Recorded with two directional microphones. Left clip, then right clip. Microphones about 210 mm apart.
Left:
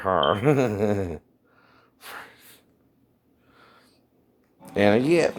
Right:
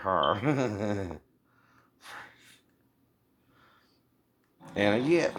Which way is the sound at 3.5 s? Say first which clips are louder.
Left 8 dB; 50° left (ahead or behind).